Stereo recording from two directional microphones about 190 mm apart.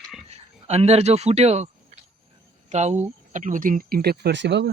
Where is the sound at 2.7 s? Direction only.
35° right (ahead or behind).